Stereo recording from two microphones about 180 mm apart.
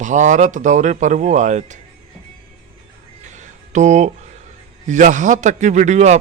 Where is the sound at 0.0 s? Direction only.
45° right (ahead or behind).